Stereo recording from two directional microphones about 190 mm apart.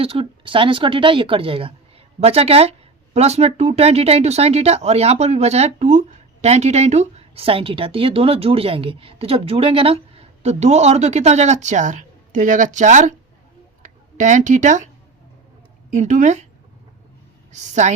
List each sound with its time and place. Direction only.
0.0 s a woman's voice: 30° right (ahead or behind)
15.9 s speech: 40° right (ahead or behind)
17.5 s speech: 40° right (ahead or behind)